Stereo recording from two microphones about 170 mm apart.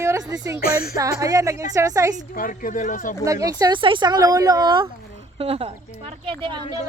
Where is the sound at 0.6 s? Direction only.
60° left (ahead or behind).